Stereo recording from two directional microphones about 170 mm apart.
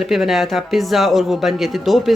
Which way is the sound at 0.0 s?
Centre (ahead or behind).